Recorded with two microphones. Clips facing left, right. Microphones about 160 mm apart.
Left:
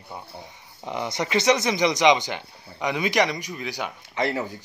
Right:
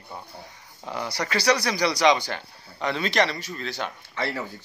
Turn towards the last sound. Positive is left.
turn(degrees=15)  # may be behind; listen again after turning